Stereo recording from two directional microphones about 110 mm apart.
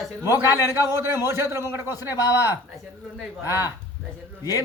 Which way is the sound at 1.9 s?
35° left (ahead or behind).